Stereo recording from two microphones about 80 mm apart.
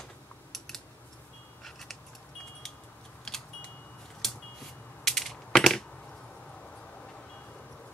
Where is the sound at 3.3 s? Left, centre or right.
Centre.